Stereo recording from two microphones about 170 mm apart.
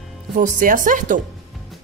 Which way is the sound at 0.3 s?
50° right (ahead or behind).